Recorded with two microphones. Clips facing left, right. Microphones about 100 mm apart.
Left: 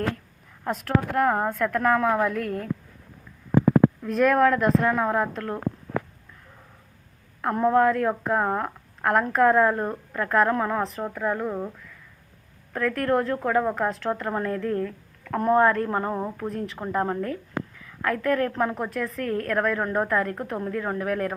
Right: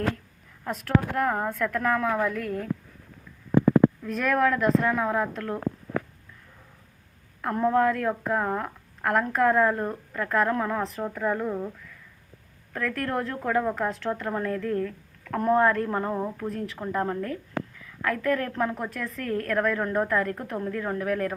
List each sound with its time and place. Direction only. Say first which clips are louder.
0.9 s a woman's voice: left 2 dB; 5° left (ahead or behind)
1.4 s a woman's voice: left 3 dB; 15° left (ahead or behind)
2.0 s a woman's voice: left 3 dB; 20° left (ahead or behind)
2.4 s a woman's voice: left 2 dB; 10° right (ahead or behind)
4.1 s a woman's voice: left 4 dB; 5° left (ahead or behind)
7.4 s a woman's voice: left 3 dB; 5° left (ahead or behind)
12.7 s a woman's voice: left 5 dB; 5° left (ahead or behind)